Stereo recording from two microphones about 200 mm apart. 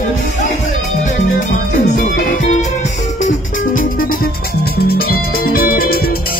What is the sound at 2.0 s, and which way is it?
Music, 40° left (ahead or behind).